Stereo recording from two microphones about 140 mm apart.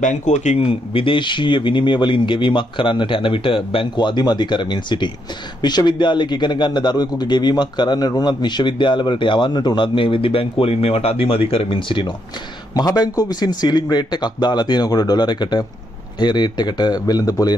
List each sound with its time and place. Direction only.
0.0 s speech: 60° left (ahead or behind)
0.7 s a man's voice: 40° left (ahead or behind)
12.7 s a man's voice: 25° left (ahead or behind)